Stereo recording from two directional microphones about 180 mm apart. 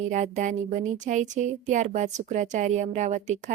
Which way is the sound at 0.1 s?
45° right (ahead or behind).